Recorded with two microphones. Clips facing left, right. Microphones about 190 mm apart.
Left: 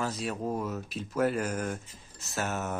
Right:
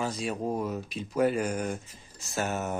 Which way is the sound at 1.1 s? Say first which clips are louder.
Right 2 dB; 10° right (ahead or behind).